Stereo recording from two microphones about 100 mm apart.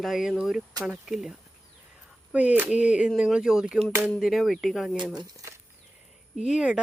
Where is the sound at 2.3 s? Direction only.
15° right (ahead or behind).